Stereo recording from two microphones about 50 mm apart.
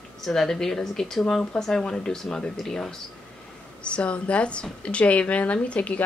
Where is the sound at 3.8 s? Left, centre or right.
Left.